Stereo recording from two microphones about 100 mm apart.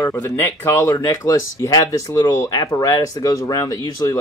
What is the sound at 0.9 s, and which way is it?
Speech, 35° left (ahead or behind).